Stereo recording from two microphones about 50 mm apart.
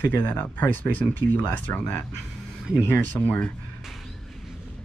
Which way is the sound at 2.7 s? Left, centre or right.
Right.